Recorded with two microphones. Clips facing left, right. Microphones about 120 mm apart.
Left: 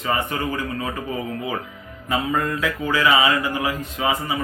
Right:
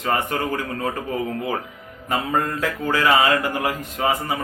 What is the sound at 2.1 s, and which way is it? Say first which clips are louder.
Speech: even; 45° right (ahead or behind).